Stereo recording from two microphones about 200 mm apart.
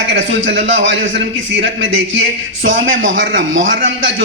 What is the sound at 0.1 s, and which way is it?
A man's voice, 65° right (ahead or behind).